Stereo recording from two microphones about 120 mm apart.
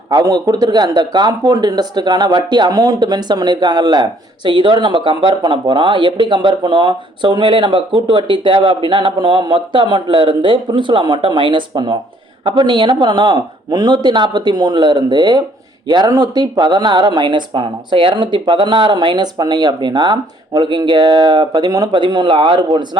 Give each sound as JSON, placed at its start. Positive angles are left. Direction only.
{"t": 0.1, "sound": "speech", "side_deg": -35}